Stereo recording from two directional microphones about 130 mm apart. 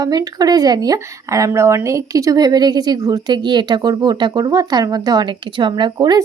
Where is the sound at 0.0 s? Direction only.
30° right (ahead or behind).